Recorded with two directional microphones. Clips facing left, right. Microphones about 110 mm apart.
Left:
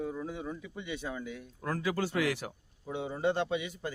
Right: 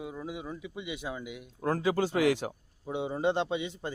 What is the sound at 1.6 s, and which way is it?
Speech, 25° right (ahead or behind).